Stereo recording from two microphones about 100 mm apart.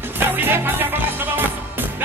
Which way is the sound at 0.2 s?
20° right (ahead or behind).